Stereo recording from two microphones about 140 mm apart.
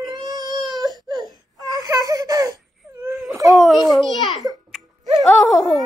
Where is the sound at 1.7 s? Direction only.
30° right (ahead or behind).